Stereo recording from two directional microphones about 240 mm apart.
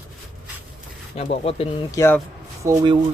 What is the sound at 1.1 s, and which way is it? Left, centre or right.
Speech, left.